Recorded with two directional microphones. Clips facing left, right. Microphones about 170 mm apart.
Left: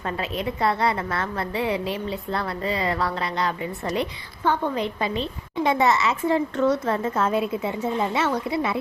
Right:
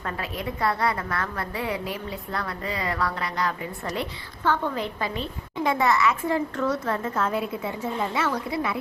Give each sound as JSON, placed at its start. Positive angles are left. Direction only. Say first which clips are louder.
{"t": 0.0, "sound": "a woman's voice", "louder": "left 4 dB", "side_deg": 25}